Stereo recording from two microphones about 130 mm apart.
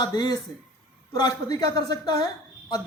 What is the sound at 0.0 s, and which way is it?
A woman's voice, 30° left (ahead or behind).